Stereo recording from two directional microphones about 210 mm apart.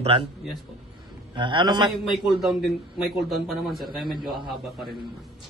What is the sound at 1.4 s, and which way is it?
Speech, 20° right (ahead or behind).